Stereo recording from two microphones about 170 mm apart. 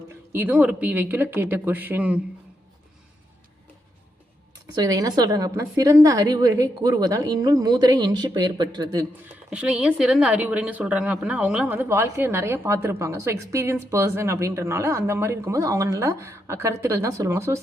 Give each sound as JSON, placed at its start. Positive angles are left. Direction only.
{"t": 0.3, "sound": "a woman's voice", "side_deg": -10}
{"t": 4.5, "sound": "a woman's voice", "side_deg": -20}
{"t": 9.5, "sound": "a woman's voice", "side_deg": -5}